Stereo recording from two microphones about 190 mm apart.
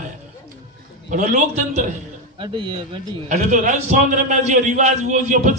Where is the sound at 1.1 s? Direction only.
40° right (ahead or behind).